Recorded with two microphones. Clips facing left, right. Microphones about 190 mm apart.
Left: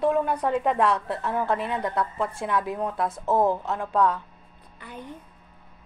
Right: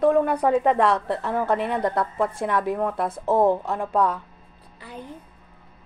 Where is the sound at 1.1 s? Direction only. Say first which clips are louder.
Right 3 dB; 60° right (ahead or behind).